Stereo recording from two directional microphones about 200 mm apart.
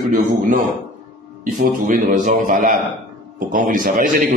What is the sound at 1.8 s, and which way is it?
A man's voice, 40° right (ahead or behind).